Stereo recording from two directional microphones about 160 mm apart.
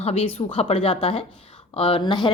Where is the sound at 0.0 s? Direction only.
40° left (ahead or behind).